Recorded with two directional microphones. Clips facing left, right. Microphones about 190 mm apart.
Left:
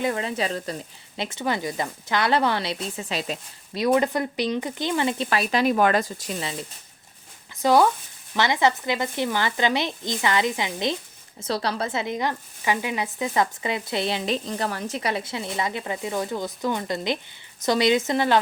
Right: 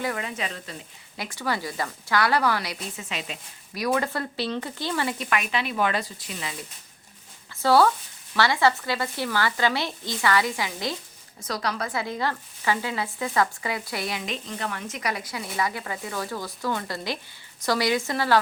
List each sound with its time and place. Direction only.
0.0 s speech: 30° left (ahead or behind)
1.1 s speech: 25° left (ahead or behind)
3.8 s speech: 20° left (ahead or behind); by 6.3 s 45° left (ahead or behind)
6.4 s speech: 30° left (ahead or behind)
7.5 s speech: 15° left (ahead or behind)